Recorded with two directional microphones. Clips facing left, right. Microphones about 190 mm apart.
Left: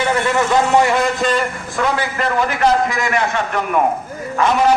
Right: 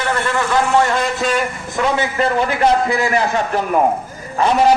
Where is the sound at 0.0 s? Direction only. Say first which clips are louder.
Left 3 dB; 20° left (ahead or behind).